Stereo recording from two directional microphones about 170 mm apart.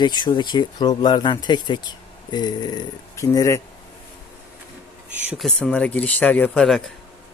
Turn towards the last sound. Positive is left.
turn(degrees=5)  # may be behind; listen again after turning